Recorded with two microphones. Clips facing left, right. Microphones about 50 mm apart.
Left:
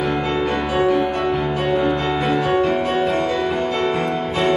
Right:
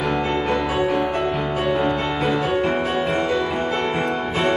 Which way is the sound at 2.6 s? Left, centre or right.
Right.